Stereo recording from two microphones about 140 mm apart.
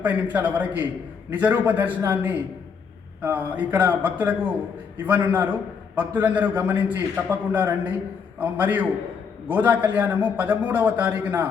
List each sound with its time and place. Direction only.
0.0 s a man's voice: 10° right (ahead or behind)